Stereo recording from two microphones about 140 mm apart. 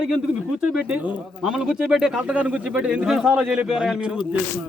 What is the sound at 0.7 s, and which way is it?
Speech, 5° right (ahead or behind).